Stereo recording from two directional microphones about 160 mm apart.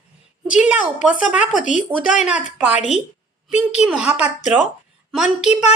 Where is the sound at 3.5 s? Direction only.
45° left (ahead or behind).